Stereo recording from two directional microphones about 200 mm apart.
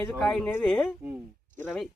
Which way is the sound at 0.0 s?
5° left (ahead or behind).